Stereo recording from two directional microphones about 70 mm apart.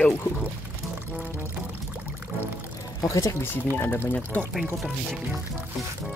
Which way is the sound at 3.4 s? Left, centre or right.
Left.